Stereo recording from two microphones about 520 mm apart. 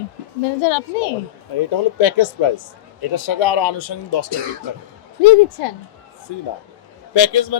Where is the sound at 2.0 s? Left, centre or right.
Left.